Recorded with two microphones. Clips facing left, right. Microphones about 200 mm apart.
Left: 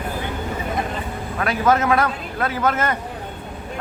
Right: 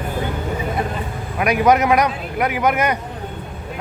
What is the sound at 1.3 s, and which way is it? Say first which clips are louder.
A man's voice: right 4 dB; 15° right (ahead or behind).